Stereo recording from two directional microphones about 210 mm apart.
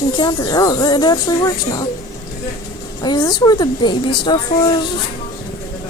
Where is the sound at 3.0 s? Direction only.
15° left (ahead or behind).